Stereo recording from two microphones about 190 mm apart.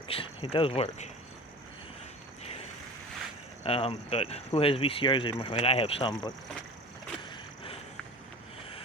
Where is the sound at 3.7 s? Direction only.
30° left (ahead or behind).